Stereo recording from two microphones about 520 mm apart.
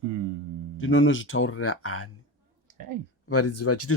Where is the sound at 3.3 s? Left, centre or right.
Left.